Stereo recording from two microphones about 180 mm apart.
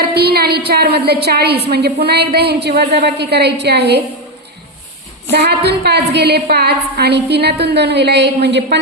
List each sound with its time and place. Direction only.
0.0 s a sound: 60° right (ahead or behind)
1.7 s a woman's voice: 65° right (ahead or behind)
5.3 s a woman's voice: 65° right (ahead or behind)